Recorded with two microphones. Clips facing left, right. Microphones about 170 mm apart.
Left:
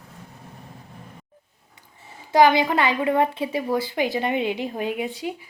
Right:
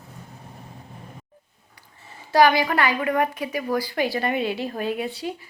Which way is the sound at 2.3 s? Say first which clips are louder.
Left 1 dB; 20° left (ahead or behind).